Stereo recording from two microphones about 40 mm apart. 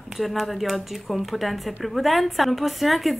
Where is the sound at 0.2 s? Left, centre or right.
Centre.